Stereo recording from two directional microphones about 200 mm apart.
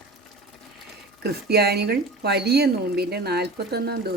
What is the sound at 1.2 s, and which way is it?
Speech, 55° right (ahead or behind).